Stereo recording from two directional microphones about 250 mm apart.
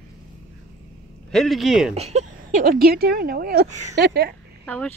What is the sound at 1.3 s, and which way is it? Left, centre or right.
Speech, centre.